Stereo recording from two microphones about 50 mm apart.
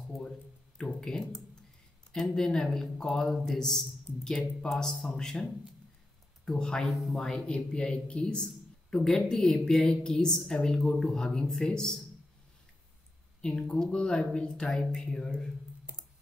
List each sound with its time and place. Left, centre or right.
0.7 s a sound: centre
2.1 s a woman's voice: centre
6.9 s speech: centre
7.3 s a woman's voice: centre
13.4 s a woman's voice: centre
14.7 s a woman's voice: centre